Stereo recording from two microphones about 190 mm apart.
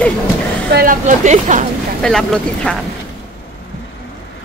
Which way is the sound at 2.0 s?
5° left (ahead or behind).